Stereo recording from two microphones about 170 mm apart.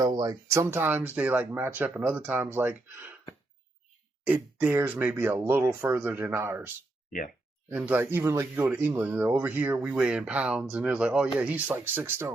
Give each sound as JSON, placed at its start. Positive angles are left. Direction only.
{"t": 0.0, "sound": "speech", "side_deg": -20}
{"t": 4.3, "sound": "speech", "side_deg": -10}
{"t": 7.7, "sound": "speech", "side_deg": -10}